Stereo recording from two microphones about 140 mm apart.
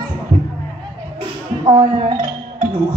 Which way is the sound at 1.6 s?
35° right (ahead or behind).